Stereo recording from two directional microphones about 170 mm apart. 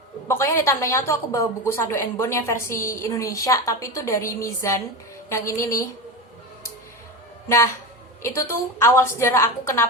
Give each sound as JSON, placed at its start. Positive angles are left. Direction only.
{"t": 0.3, "sound": "a woman's voice", "side_deg": 15}
{"t": 7.4, "sound": "a woman's voice", "side_deg": 15}